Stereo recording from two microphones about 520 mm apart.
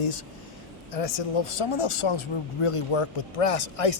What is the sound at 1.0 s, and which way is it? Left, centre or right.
Speech, left.